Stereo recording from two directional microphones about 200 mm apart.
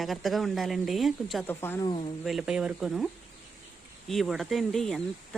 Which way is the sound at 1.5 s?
10° left (ahead or behind).